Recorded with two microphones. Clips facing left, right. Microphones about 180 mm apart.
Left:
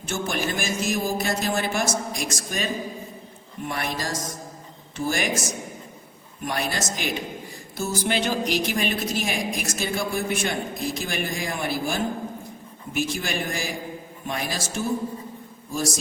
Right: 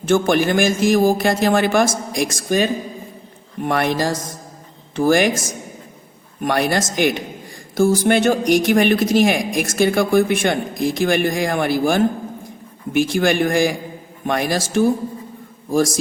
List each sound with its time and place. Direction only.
0.1 s a man's voice: 85° right
3.7 s a man's voice: 85° right
6.5 s speech: 70° right (ahead or behind)
7.8 s a man's voice: 90° right
8.0 s speech: 60° right (ahead or behind)
13.1 s a man's voice: 90° right
14.3 s speech: 70° right (ahead or behind)